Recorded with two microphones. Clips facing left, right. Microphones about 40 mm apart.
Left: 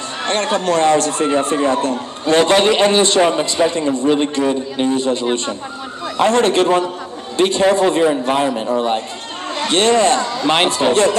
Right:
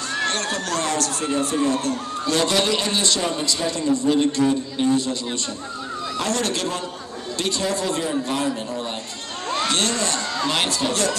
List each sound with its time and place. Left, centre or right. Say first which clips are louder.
0.2 s speech: left 8 dB; left